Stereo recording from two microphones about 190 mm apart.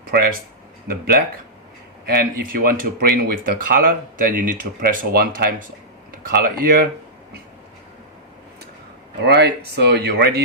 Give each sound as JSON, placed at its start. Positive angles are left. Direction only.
{"t": 0.1, "sound": "speech", "side_deg": -50}
{"t": 9.2, "sound": "speech", "side_deg": -60}